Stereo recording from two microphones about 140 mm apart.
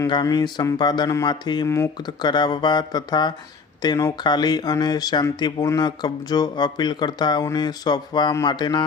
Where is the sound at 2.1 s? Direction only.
30° left (ahead or behind).